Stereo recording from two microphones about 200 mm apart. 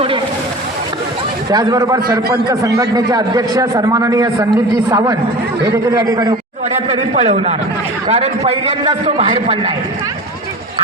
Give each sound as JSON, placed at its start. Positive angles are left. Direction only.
{"t": 1.5, "sound": "a man's voice", "side_deg": -20}
{"t": 6.9, "sound": "a man's voice", "side_deg": -30}